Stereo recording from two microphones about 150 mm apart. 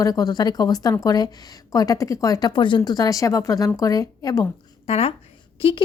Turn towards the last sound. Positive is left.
turn(degrees=35)  # may be behind; listen again after turning